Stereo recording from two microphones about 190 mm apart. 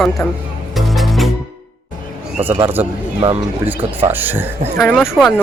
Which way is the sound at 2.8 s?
10° right (ahead or behind).